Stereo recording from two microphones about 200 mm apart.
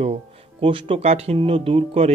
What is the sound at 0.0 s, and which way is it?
Speech, 30° right (ahead or behind).